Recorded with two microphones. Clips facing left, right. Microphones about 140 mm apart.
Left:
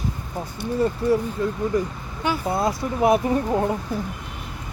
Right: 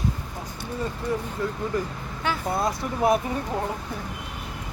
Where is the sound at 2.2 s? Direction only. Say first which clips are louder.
Left 3 dB; 20° left (ahead or behind).